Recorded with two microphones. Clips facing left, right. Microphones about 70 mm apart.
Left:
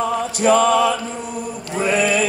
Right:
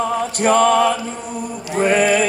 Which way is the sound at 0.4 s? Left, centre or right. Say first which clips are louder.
Right 1 dB; right.